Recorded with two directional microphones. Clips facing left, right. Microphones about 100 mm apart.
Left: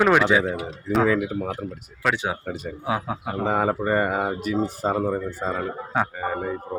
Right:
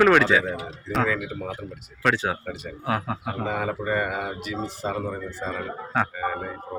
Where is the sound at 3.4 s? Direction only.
35° left (ahead or behind).